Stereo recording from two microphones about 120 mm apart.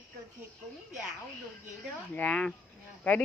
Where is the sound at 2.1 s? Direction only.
10° left (ahead or behind).